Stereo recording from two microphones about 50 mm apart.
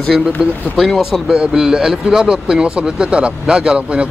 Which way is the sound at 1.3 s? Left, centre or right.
Centre.